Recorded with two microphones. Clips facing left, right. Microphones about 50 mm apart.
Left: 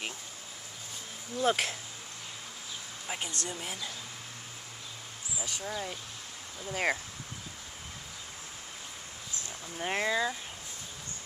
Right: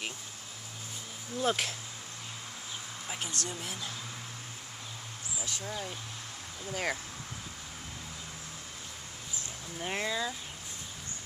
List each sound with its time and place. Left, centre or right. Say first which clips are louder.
1.4 s speech: left 2 dB; centre
3.1 s speech: left 1 dB; centre
5.4 s speech: left 2 dB; centre
6.7 s speech: left 3 dB; left
9.8 s speech: left 4 dB; centre